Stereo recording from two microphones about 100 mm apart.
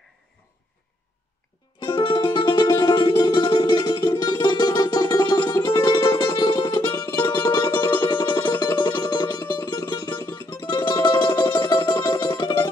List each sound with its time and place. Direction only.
1.8 s music: 50° left (ahead or behind)
7.2 s music: 30° left (ahead or behind)
8.1 s music: 45° left (ahead or behind)